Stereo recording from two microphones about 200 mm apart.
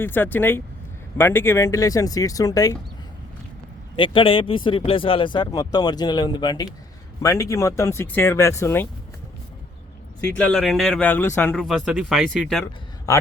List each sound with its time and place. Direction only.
0.0 s speech: 10° left (ahead or behind)
3.9 s speech: 25° left (ahead or behind)
10.2 s speech: 5° left (ahead or behind)
13.1 s a man's voice: 15° left (ahead or behind)